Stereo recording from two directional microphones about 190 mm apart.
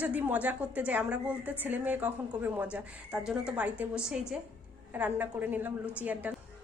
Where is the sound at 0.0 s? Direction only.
10° right (ahead or behind).